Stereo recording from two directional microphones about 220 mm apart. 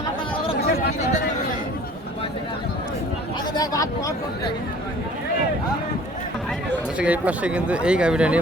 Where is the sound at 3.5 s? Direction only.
15° left (ahead or behind).